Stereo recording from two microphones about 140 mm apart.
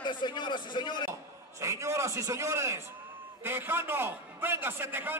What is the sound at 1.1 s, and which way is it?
A man's voice, 20° right (ahead or behind).